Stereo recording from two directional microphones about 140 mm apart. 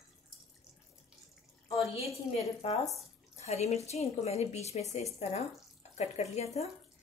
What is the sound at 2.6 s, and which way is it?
Speech, 45° left (ahead or behind).